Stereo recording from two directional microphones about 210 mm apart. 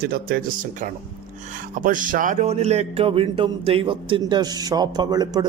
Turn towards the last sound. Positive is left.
turn(degrees=-20)  # may be behind; listen again after turning